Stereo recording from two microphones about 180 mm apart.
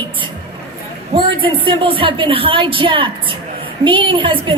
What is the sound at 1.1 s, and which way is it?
A woman's voice, 30° right (ahead or behind).